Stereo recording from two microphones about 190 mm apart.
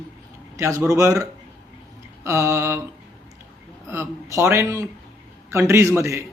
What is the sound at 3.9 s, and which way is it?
A man's voice, 15° right (ahead or behind).